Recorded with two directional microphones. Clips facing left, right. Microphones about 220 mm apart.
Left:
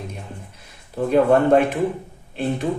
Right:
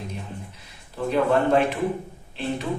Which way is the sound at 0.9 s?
50° left (ahead or behind).